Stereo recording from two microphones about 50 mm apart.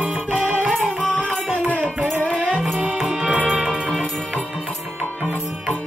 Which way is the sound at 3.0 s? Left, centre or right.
Centre.